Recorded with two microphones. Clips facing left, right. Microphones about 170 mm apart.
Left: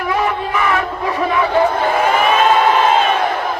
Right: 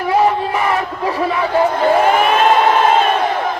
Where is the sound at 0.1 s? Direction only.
35° right (ahead or behind).